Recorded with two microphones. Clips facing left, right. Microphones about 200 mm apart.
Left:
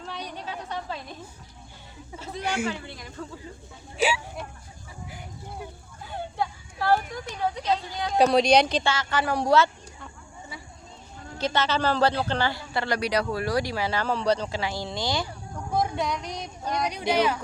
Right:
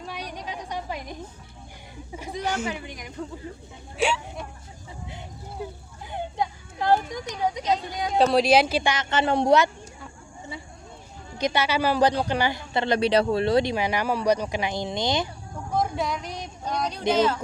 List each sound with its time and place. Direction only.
0.0 s a sound: 10° right (ahead or behind)
2.1 s a man's voice: 15° right (ahead or behind)
2.4 s speech: 10° left (ahead or behind)
2.6 s a man's voice: 15° right (ahead or behind)
3.9 s speech: centre (ahead or behind)
6.1 s a child's voice: 20° right (ahead or behind)
8.2 s a man's voice: centre (ahead or behind); by 9.6 s 20° right (ahead or behind)
11.3 s a man's voice: 15° right (ahead or behind)
15.8 s speech: centre (ahead or behind)